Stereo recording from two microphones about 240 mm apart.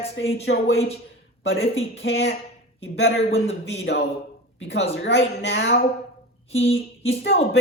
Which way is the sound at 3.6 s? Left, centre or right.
Left.